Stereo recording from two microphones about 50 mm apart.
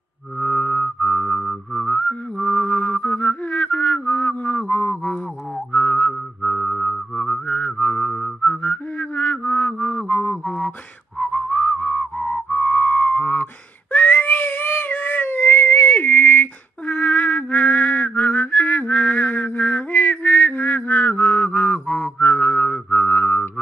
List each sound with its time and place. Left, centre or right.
0.4 s music: left
5.7 s a sound: left
6.5 s music: centre; by 8.1 s left
8.4 s whistling: left
13.9 s cat: left